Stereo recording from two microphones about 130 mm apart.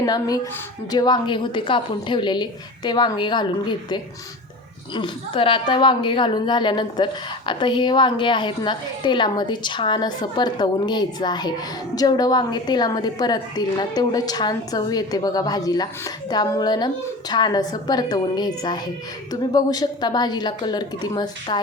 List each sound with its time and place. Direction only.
0.0 s a woman's voice: 30° left (ahead or behind)